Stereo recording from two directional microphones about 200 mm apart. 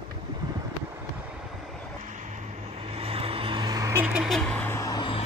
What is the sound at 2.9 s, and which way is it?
Vehicle, 30° right (ahead or behind).